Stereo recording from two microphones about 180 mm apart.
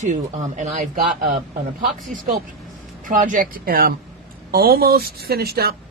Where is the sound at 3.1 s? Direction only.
45° right (ahead or behind).